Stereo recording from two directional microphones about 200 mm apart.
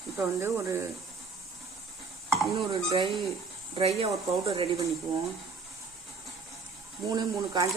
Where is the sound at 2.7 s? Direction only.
25° right (ahead or behind).